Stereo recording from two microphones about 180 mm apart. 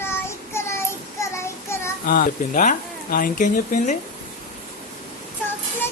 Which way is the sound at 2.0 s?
50° left (ahead or behind).